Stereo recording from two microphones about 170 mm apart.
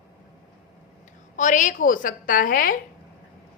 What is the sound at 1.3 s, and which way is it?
A woman's voice, 50° left (ahead or behind).